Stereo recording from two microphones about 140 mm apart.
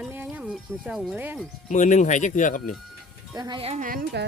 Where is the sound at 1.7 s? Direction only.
60° left (ahead or behind).